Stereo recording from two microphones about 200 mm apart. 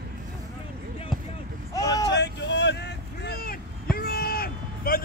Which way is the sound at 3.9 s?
50° left (ahead or behind).